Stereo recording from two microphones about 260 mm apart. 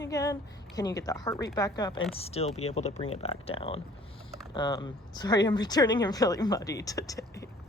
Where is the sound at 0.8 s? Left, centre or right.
Centre.